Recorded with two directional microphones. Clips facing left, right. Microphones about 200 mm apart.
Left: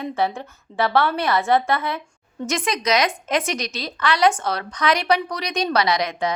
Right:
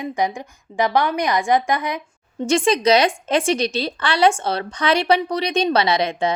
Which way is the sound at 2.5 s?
30° right (ahead or behind).